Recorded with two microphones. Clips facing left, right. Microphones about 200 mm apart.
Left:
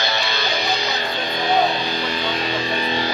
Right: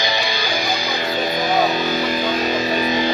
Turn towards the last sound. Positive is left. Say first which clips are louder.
# right 4 dB
turn(degrees=-10)  # may be behind; listen again after turning